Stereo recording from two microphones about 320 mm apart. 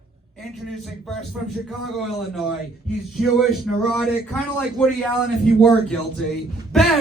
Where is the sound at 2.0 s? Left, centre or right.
Centre.